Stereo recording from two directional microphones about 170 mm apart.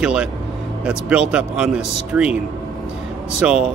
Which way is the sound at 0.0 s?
5° right (ahead or behind).